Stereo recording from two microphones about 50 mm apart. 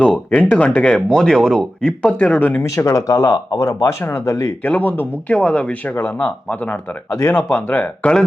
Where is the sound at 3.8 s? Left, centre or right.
Left.